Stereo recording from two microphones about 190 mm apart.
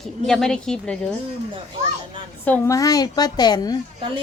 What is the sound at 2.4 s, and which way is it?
A woman's voice, 10° left (ahead or behind).